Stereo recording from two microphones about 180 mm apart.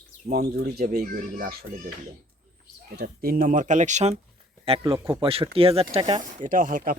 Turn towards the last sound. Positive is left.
turn(degrees=-50)  # may be behind; listen again after turning